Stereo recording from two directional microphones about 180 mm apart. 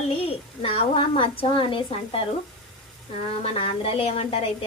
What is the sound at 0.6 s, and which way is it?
Speech, 30° left (ahead or behind).